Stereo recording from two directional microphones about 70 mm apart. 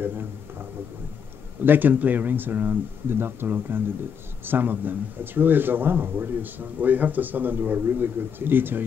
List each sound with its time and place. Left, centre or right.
1.6 s speech: right